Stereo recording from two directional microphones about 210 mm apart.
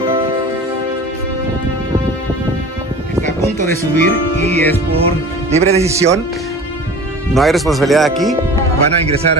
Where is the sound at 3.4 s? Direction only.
15° left (ahead or behind).